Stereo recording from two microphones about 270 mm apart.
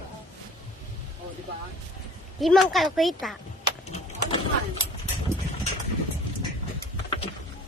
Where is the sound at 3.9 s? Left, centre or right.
Centre.